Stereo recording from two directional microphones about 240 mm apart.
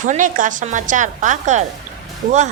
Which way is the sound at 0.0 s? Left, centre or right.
Right.